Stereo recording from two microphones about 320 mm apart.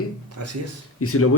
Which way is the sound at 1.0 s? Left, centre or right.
Left.